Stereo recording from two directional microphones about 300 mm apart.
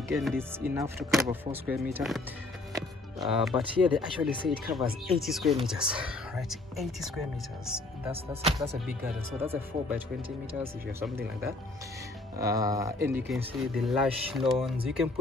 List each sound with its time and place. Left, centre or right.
0.1 s speech: centre
8.1 s speech: centre
9.4 s speech: centre
11.0 s speech: centre